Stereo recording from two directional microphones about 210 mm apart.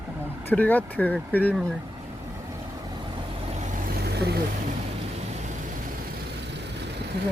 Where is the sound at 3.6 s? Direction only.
40° right (ahead or behind).